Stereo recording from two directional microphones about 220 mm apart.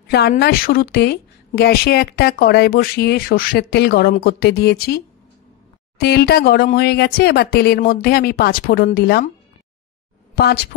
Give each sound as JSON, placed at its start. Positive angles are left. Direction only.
{"t": 0.1, "sound": "a woman's voice", "side_deg": 50}
{"t": 10.3, "sound": "speech", "side_deg": 45}